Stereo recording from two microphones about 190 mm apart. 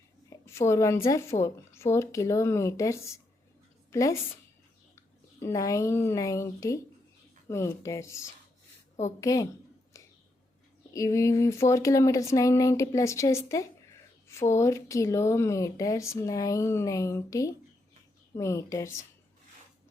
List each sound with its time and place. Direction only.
0.3 s a woman's voice: 15° left (ahead or behind)
10.9 s speech: 15° left (ahead or behind)